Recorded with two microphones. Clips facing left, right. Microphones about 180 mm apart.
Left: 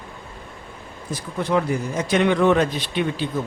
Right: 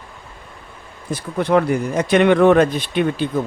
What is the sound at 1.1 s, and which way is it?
A man's voice, 60° right (ahead or behind).